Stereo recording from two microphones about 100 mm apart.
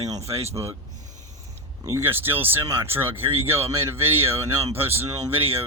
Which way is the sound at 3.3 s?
70° right (ahead or behind).